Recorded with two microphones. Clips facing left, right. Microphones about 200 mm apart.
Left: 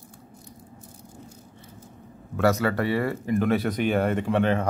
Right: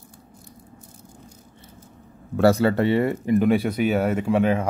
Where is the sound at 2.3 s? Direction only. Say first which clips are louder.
Right 5 dB; 30° right (ahead or behind); by 4.6 s 10° right (ahead or behind).